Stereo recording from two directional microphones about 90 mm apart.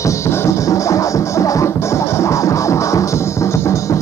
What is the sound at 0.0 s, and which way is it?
Music, 35° left (ahead or behind).